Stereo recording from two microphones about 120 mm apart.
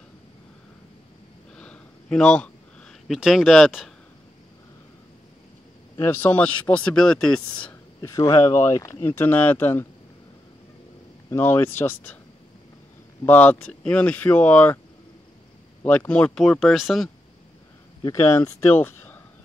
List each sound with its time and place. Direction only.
1.6 s a sound: 5° left (ahead or behind)
3.1 s speech: 5° right (ahead or behind)
6.1 s speech: 15° left (ahead or behind)
8.0 s speech: 25° left (ahead or behind)
9.0 s speech: 15° left (ahead or behind)
11.2 s speech: 20° left (ahead or behind)
13.2 s speech: 15° left (ahead or behind)
15.8 s speech: 15° left (ahead or behind); by 17.1 s centre (ahead or behind)
18.0 s speech: 25° left (ahead or behind)